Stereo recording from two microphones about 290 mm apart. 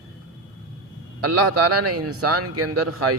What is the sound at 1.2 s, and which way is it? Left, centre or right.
Speech, right.